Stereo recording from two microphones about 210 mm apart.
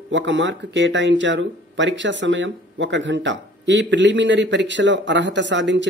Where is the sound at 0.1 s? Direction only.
60° right (ahead or behind).